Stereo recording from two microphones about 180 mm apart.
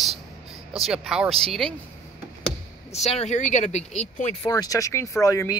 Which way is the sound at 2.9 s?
35° left (ahead or behind).